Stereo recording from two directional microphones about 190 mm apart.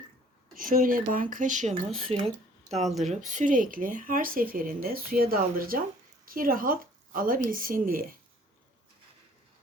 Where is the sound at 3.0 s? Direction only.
40° right (ahead or behind).